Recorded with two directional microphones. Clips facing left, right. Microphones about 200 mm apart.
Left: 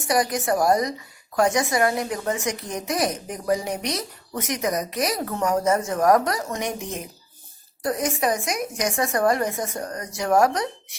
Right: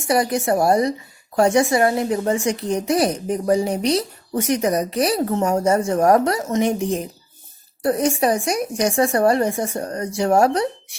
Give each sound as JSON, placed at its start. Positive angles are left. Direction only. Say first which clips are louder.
{"t": 0.1, "sound": "a woman's voice", "louder": "right 4 dB", "side_deg": -25}